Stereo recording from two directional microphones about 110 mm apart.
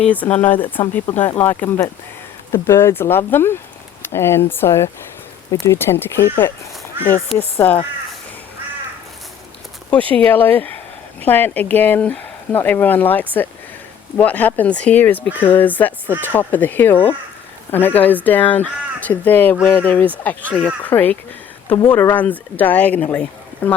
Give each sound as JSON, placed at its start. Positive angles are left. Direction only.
{"t": 0.0, "sound": "speech", "side_deg": 15}
{"t": 7.0, "sound": "speech", "side_deg": -20}
{"t": 7.3, "sound": "speech", "side_deg": 0}
{"t": 10.0, "sound": "speech", "side_deg": -55}
{"t": 10.2, "sound": "speech", "side_deg": 15}